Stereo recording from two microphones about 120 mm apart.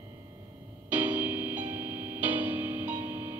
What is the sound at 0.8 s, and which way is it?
Music, 15° right (ahead or behind).